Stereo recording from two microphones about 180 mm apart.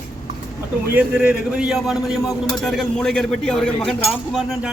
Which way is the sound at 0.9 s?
5° right (ahead or behind).